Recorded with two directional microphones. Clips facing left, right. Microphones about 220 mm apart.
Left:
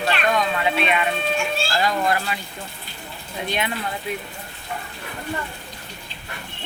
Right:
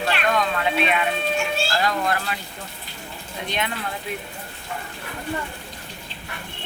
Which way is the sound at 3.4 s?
5° left (ahead or behind).